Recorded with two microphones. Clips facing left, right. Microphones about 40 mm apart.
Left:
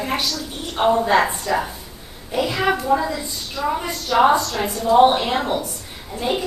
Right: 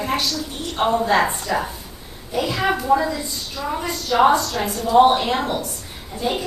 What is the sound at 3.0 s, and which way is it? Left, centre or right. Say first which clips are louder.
A woman's voice: right 1 dB; centre.